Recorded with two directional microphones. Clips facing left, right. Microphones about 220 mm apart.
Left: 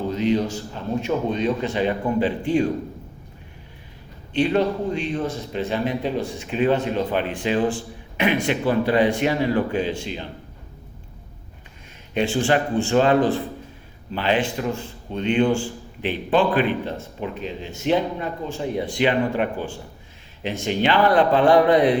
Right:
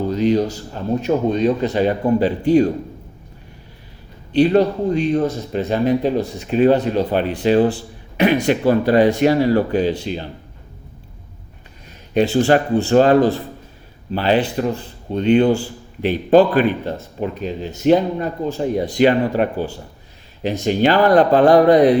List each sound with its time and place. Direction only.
0.1 s a man's voice: 40° right (ahead or behind)
4.3 s a man's voice: 40° right (ahead or behind)
12.1 s a man's voice: 40° right (ahead or behind)